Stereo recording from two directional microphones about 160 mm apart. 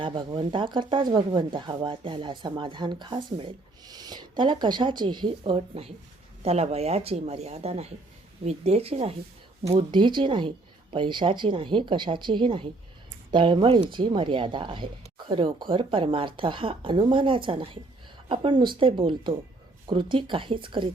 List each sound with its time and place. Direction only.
0.0 s speech: 30° right (ahead or behind)